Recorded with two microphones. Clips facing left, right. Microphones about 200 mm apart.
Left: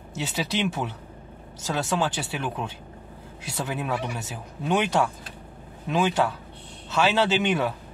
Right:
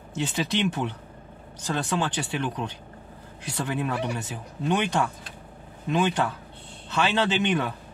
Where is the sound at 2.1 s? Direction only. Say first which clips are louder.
Right 1 dB; 5° left (ahead or behind).